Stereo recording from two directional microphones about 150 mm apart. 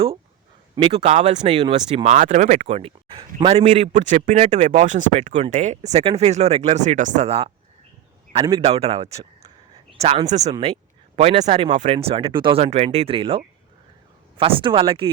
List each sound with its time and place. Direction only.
0.8 s a man's voice: 40° right (ahead or behind)
2.0 s a man's voice: 55° right (ahead or behind); by 15.1 s 35° right (ahead or behind)